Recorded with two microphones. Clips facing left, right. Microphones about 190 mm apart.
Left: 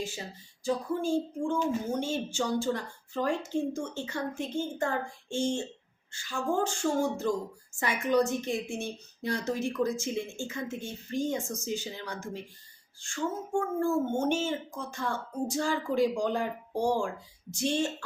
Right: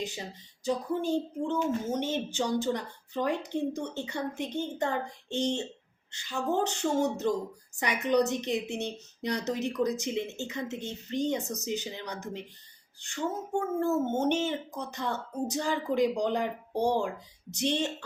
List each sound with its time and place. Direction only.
0.6 s speech: 20° right (ahead or behind)